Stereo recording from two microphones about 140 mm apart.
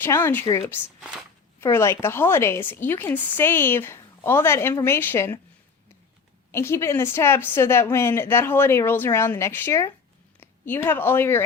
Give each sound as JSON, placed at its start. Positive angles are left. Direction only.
{"t": 0.0, "sound": "a woman's voice", "side_deg": 15}
{"t": 1.6, "sound": "a woman's voice", "side_deg": 20}
{"t": 6.5, "sound": "a woman's voice", "side_deg": 20}